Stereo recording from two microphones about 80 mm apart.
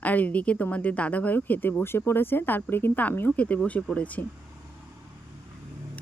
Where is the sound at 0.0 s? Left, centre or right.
Centre.